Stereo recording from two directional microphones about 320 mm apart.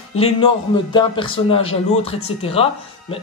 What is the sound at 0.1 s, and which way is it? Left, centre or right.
Speech, centre.